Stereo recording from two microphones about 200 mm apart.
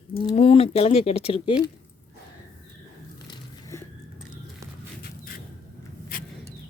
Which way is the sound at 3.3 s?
15° left (ahead or behind).